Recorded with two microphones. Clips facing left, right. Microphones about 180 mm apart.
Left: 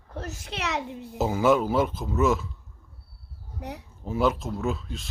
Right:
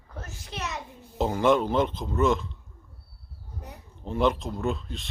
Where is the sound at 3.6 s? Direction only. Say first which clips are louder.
Left 7 dB; 75° left (ahead or behind).